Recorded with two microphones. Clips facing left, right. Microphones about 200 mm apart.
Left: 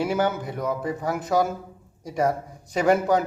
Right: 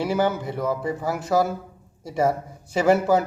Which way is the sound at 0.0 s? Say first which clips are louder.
Right 1 dB; centre (ahead or behind).